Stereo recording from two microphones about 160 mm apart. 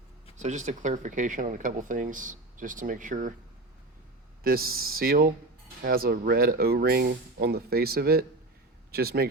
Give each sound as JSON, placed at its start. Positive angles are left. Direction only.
{"t": 0.3, "sound": "speech", "side_deg": -50}
{"t": 4.4, "sound": "speech", "side_deg": -70}